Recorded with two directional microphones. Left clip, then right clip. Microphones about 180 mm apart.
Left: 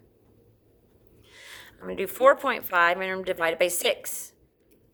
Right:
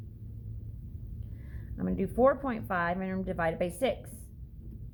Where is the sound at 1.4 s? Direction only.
30° left (ahead or behind).